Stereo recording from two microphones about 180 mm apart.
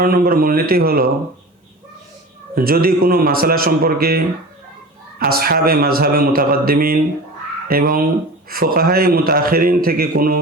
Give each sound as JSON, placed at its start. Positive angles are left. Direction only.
{"t": 0.0, "sound": "a man's voice", "side_deg": -55}
{"t": 2.6, "sound": "a man's voice", "side_deg": -55}
{"t": 5.2, "sound": "a man's voice", "side_deg": -55}